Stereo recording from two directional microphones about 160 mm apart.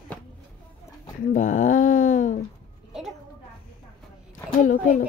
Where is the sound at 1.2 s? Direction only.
50° left (ahead or behind).